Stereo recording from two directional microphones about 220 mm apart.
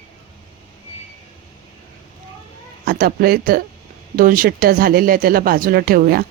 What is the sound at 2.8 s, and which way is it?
Speech, 45° right (ahead or behind).